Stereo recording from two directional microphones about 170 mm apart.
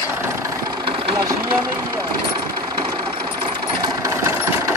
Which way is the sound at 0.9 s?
30° right (ahead or behind).